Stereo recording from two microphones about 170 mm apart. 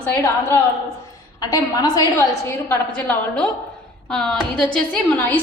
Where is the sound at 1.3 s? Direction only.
20° left (ahead or behind).